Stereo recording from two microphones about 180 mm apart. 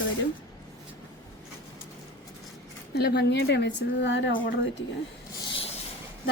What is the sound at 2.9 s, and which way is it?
A woman's voice, 65° left (ahead or behind).